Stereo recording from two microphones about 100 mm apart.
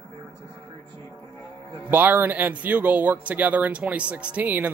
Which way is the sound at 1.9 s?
20° right (ahead or behind).